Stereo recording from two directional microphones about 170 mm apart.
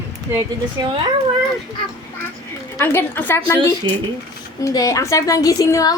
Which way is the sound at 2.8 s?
15° left (ahead or behind).